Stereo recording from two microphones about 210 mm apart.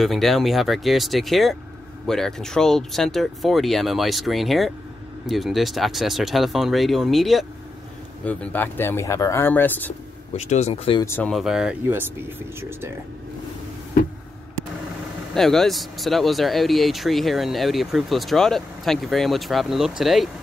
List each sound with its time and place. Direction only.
0.0 s speech: centre (ahead or behind)
10.3 s speech: 30° left (ahead or behind)
11.1 s speech: 5° left (ahead or behind); by 12.9 s 10° right (ahead or behind)
15.3 s speech: centre (ahead or behind)